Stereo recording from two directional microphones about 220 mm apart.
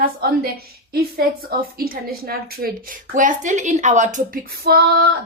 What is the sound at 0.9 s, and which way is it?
A woman's voice, 45° right (ahead or behind).